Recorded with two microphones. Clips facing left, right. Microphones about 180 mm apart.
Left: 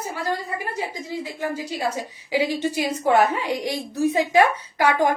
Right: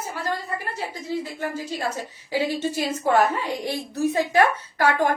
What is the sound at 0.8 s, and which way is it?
A woman's voice, 15° left (ahead or behind).